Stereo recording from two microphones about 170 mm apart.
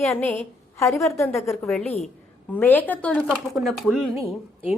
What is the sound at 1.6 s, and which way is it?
A woman's voice, 5° left (ahead or behind).